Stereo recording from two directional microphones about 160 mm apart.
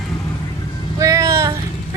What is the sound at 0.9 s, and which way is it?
Speech, 20° right (ahead or behind).